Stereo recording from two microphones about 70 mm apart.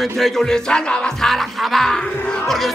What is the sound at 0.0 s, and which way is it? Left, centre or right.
Music, centre.